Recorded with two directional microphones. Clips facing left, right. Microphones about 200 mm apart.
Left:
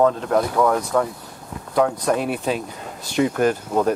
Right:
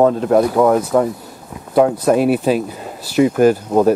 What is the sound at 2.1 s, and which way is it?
Speech, 5° right (ahead or behind).